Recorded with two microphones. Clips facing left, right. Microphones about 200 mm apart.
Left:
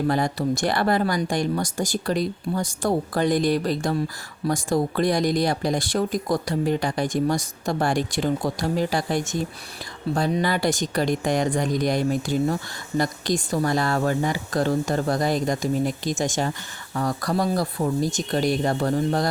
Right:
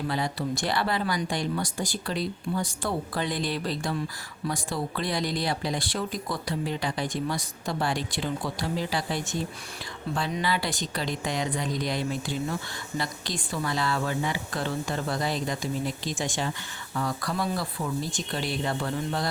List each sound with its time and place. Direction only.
0.1 s speech: 45° left (ahead or behind)